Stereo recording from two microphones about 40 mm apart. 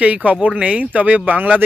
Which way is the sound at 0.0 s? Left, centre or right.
Right.